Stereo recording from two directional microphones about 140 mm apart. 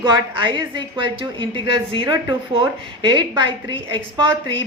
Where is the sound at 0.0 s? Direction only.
35° right (ahead or behind).